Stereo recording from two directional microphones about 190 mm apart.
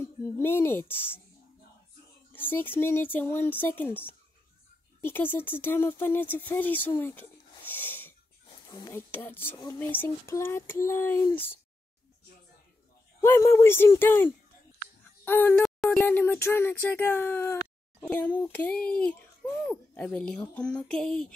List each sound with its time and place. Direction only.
0.0 s speech: 10° left (ahead or behind)
2.3 s speech: 10° left (ahead or behind)
13.2 s a child's voice: 15° left (ahead or behind)